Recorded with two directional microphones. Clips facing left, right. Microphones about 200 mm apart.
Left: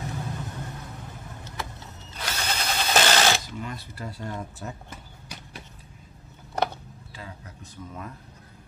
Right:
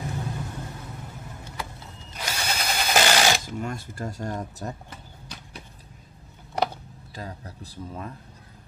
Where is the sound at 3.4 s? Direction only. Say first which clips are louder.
Right 4 dB; 45° right (ahead or behind).